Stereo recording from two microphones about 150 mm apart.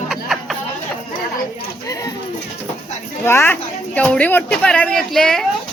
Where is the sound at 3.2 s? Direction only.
15° left (ahead or behind).